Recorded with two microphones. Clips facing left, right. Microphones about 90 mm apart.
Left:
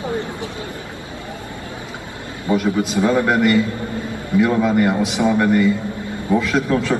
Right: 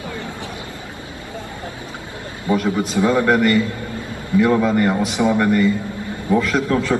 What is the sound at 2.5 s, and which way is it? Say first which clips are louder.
A man's voice: left 1 dB; 15° left (ahead or behind).